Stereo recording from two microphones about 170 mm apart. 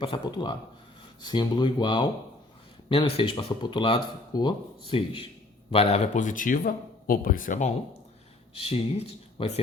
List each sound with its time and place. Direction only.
0.0 s speech: 30° left (ahead or behind); by 7.7 s 50° left (ahead or behind)
8.5 s speech: 35° left (ahead or behind)